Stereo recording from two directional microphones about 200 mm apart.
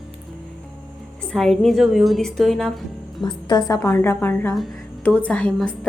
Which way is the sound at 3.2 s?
20° left (ahead or behind).